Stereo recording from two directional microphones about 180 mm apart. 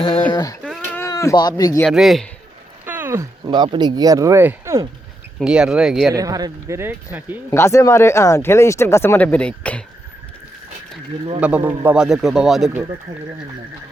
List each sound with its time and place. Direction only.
0.0 s speech: 25° left (ahead or behind)
0.6 s a sound: 5° left (ahead or behind)
1.0 s speech: 15° left (ahead or behind)
1.8 s a man's voice: centre (ahead or behind)
5.4 s a man's voice: 5° right (ahead or behind)
6.1 s speech: 20° right (ahead or behind)
7.5 s speech: 15° left (ahead or behind)
11.3 s a man's voice: 10° right (ahead or behind)